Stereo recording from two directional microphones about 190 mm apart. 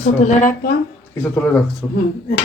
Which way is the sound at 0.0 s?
40° left (ahead or behind).